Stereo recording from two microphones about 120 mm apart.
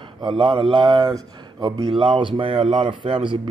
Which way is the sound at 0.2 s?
45° right (ahead or behind).